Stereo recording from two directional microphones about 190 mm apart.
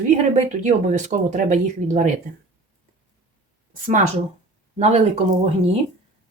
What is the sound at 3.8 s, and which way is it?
A woman's voice, 40° right (ahead or behind).